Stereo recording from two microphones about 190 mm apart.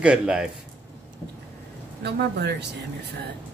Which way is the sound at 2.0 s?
60° right (ahead or behind).